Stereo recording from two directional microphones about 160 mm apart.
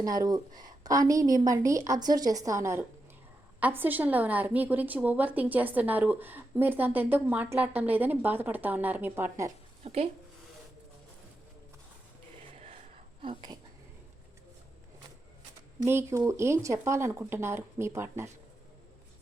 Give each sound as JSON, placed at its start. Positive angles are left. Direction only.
{"t": 0.0, "sound": "a woman's voice", "side_deg": -25}
{"t": 9.8, "sound": "speech", "side_deg": -40}
{"t": 12.5, "sound": "a sound", "side_deg": -40}
{"t": 13.2, "sound": "a woman's voice", "side_deg": -30}
{"t": 15.8, "sound": "a woman's voice", "side_deg": -15}